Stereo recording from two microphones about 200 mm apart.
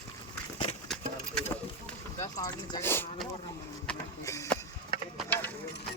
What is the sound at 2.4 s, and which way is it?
Dog, 15° left (ahead or behind).